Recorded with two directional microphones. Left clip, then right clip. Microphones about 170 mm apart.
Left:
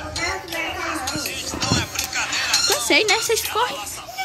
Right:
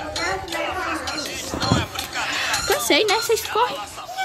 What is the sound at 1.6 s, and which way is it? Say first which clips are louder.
Music: even; 15° right (ahead or behind).